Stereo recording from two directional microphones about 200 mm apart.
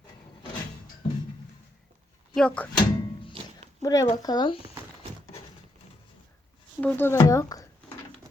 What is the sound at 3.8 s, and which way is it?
Speech, 15° left (ahead or behind).